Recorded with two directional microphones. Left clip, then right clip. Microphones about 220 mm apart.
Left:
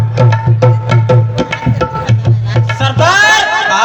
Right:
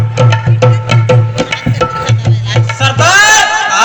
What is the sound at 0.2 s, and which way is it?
Music, 40° right (ahead or behind).